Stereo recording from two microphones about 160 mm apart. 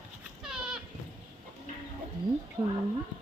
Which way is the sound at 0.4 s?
5° right (ahead or behind).